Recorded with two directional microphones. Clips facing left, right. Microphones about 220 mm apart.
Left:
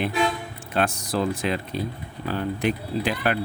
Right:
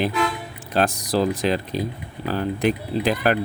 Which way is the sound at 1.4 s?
35° right (ahead or behind).